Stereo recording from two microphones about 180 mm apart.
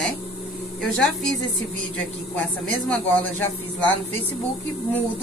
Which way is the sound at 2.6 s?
10° left (ahead or behind).